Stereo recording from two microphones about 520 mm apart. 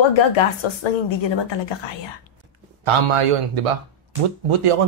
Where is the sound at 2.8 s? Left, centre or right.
Right.